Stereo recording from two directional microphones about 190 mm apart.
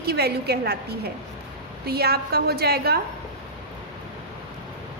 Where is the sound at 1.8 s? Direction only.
55° right (ahead or behind).